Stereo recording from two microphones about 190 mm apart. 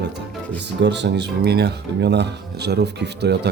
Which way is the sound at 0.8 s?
65° right (ahead or behind).